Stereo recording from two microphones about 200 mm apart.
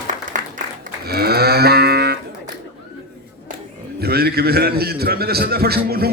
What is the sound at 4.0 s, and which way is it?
A man's voice, 50° right (ahead or behind).